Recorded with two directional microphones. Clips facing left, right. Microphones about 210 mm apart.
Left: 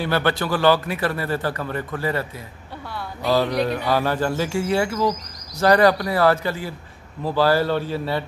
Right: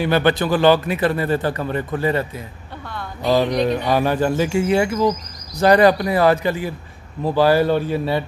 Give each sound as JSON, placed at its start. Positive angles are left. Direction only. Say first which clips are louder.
{"t": 0.0, "sound": "a man's voice", "louder": "right 4 dB", "side_deg": -20}
{"t": 2.9, "sound": "speech", "louder": "right 1 dB", "side_deg": 10}
{"t": 3.3, "sound": "speech", "louder": "right 3 dB", "side_deg": -15}